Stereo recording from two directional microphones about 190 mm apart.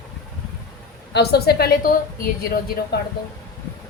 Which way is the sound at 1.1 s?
60° left (ahead or behind).